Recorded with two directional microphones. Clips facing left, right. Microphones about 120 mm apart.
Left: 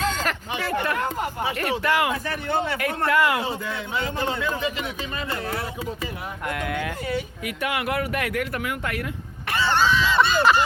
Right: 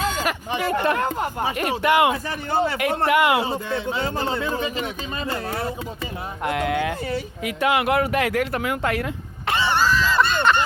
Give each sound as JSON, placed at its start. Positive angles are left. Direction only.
{"t": 0.0, "sound": "a sound", "side_deg": -10}
{"t": 0.7, "sound": "a man's voice", "side_deg": -25}
{"t": 0.9, "sound": "speech", "side_deg": -45}
{"t": 1.8, "sound": "a man's voice", "side_deg": -20}
{"t": 2.5, "sound": "a man's voice", "side_deg": -35}
{"t": 2.7, "sound": "a man's voice", "side_deg": -25}
{"t": 6.4, "sound": "a man's voice", "side_deg": -25}
{"t": 8.2, "sound": "speech", "side_deg": -90}
{"t": 8.5, "sound": "a man's voice", "side_deg": -30}
{"t": 9.5, "sound": "a sound", "side_deg": -20}
{"t": 9.7, "sound": "honk", "side_deg": 0}